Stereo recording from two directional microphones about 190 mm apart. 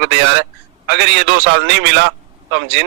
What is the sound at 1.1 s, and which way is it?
Speech, 65° right (ahead or behind).